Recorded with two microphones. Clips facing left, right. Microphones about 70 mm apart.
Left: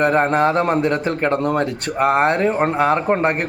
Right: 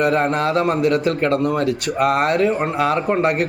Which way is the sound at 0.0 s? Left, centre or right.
Left.